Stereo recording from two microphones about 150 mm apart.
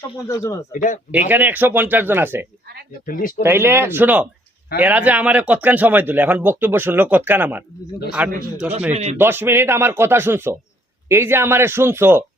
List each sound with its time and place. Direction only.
0.3 s speech: 20° left (ahead or behind)
0.7 s speech: 60° left (ahead or behind)
1.3 s speech: 10° right (ahead or behind)
3.1 s speech: 70° left (ahead or behind)
3.4 s speech: 15° right (ahead or behind)
8.9 s speech: 45° right (ahead or behind)
9.1 s speech: 15° right (ahead or behind)